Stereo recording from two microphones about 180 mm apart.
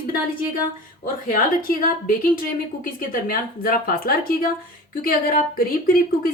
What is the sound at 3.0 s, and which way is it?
Speech, 50° left (ahead or behind).